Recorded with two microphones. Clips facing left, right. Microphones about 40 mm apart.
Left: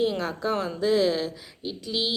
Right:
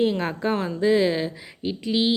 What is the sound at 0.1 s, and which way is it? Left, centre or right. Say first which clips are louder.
Speech: right 3 dB; right.